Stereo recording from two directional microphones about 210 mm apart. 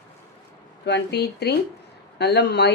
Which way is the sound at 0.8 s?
55° left (ahead or behind).